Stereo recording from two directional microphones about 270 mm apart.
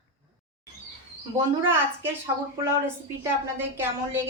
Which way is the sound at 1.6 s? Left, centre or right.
Centre.